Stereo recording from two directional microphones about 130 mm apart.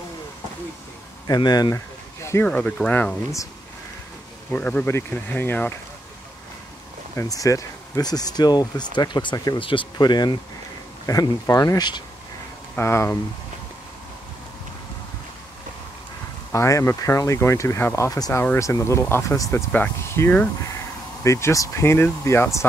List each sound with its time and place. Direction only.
1.2 s speech: 30° left (ahead or behind)
2.2 s a sound: 20° left (ahead or behind)
2.5 s speech: 10° left (ahead or behind)
4.5 s speech: 10° left (ahead or behind)
7.2 s speech: 25° left (ahead or behind)
12.7 s speech: 20° left (ahead or behind)
16.5 s speech: 25° left (ahead or behind)